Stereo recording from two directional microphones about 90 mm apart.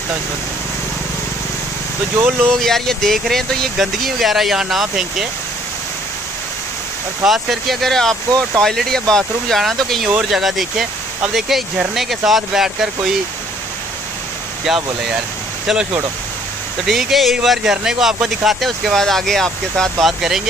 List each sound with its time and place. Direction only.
2.1 s speech: 20° right (ahead or behind)
2.6 s speech: 5° left (ahead or behind)
7.2 s speech: centre (ahead or behind)
14.7 s speech: 5° right (ahead or behind)